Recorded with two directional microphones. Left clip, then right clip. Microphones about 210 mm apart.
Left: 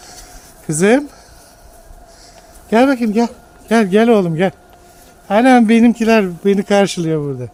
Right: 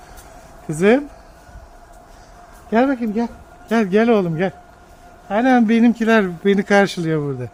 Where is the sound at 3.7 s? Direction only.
20° left (ahead or behind).